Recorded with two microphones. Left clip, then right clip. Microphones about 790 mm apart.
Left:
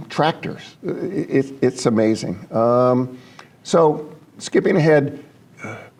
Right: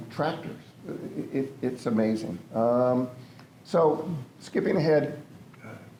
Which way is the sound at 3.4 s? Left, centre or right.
Left.